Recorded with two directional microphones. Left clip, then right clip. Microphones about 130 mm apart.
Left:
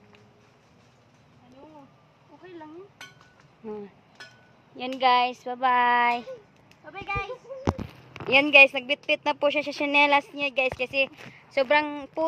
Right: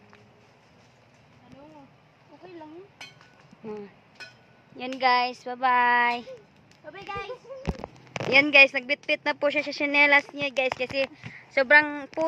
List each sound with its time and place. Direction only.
3.6 s speech: 20° left (ahead or behind)
4.7 s speech: 5° right (ahead or behind)
6.8 s speech: 10° right (ahead or behind)
8.3 s a woman's voice: 5° left (ahead or behind)
11.5 s a woman's voice: 15° left (ahead or behind)